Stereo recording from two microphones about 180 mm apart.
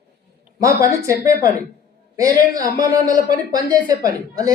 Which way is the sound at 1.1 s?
15° right (ahead or behind).